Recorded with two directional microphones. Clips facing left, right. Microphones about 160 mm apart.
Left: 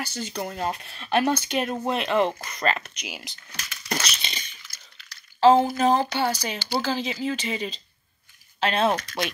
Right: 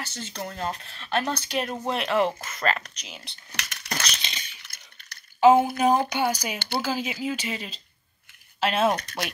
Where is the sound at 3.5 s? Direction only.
70° right (ahead or behind).